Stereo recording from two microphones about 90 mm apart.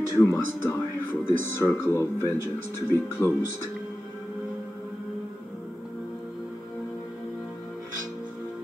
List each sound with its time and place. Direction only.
0.1 s speech: 35° left (ahead or behind)